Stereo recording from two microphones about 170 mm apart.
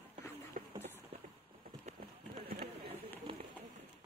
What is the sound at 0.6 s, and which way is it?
Clip-clop, 60° right (ahead or behind).